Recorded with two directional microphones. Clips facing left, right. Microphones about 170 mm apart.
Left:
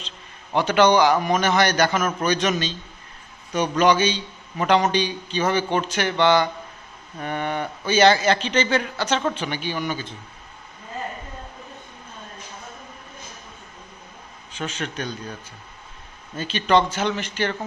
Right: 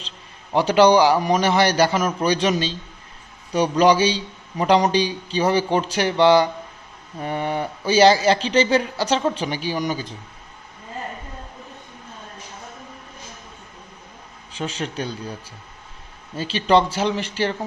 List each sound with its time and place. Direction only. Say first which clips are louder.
0.5 s speech: right 3 dB; 35° right (ahead or behind)
14.5 s speech: right 2 dB; 35° right (ahead or behind)
16.4 s speech: right 2 dB; 30° right (ahead or behind)